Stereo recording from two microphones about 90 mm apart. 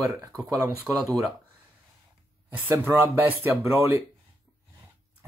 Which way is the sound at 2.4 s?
25° right (ahead or behind).